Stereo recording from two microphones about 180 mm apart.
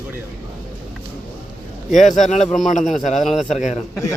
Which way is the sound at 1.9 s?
40° left (ahead or behind).